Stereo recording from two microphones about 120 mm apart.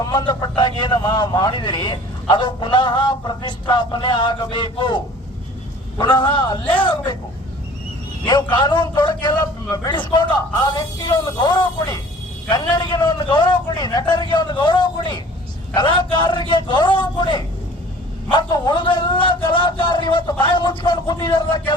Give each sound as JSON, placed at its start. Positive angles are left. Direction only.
{"t": 0.0, "sound": "a man's voice", "side_deg": 35}
{"t": 6.2, "sound": "a man's voice", "side_deg": 40}
{"t": 6.7, "sound": "speech", "side_deg": 15}
{"t": 8.2, "sound": "a man's voice", "side_deg": 35}